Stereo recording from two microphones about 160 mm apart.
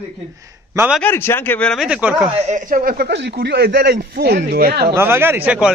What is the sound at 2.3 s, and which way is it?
A man's voice, 50° right (ahead or behind).